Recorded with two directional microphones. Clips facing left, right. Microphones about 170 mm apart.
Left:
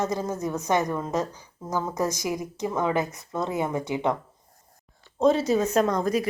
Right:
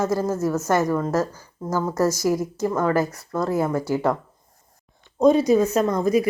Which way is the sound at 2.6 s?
5° right (ahead or behind).